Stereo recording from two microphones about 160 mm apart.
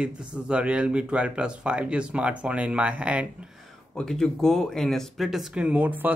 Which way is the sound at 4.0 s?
5° left (ahead or behind).